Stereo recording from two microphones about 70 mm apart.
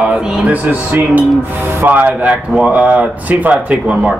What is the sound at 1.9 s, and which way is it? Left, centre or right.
Speech, right.